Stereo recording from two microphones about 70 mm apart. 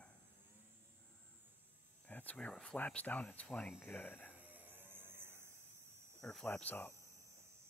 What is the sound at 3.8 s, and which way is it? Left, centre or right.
Speech, left.